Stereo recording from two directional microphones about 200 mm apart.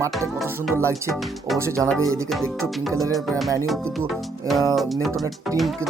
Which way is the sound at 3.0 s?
Centre (ahead or behind).